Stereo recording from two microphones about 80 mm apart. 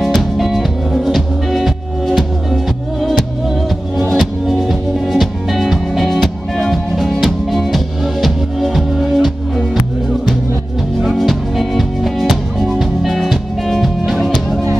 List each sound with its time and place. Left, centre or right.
0.0 s music: centre
11.0 s music: centre